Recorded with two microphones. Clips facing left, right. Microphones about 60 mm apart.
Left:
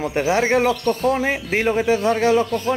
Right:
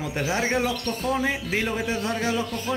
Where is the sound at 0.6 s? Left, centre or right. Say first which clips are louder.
Left 7 dB; left.